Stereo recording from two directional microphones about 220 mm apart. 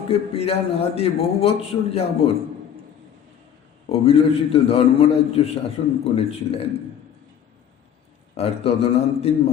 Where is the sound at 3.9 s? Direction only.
25° left (ahead or behind).